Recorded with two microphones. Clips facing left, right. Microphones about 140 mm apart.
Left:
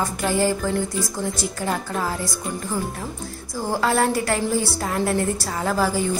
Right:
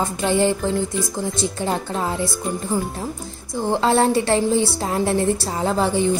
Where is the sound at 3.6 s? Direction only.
25° right (ahead or behind).